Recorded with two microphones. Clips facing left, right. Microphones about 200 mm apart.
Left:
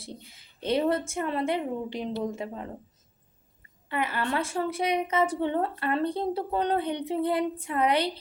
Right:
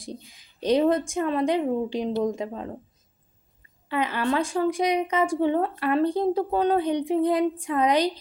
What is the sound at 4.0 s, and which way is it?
A woman's voice, 20° right (ahead or behind).